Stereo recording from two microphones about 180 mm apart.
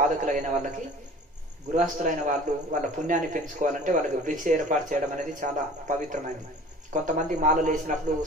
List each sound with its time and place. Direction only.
0.2 s a man's voice: 45° right (ahead or behind)